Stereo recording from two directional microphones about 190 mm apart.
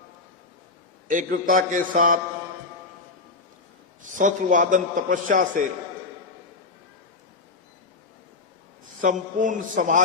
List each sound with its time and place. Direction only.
1.0 s a man's voice: 45° right (ahead or behind)
4.2 s a man's voice: 40° right (ahead or behind)
9.0 s a man's voice: 40° right (ahead or behind)